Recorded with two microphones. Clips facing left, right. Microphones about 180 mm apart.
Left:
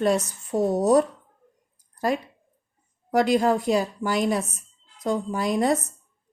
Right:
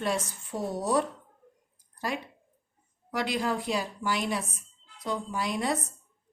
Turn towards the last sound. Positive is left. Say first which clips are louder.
# left 7 dB
turn(degrees=45)  # may be behind; listen again after turning